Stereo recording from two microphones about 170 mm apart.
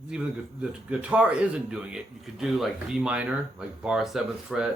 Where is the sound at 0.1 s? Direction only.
5° right (ahead or behind).